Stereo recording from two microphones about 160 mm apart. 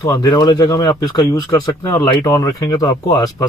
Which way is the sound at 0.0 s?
20° left (ahead or behind).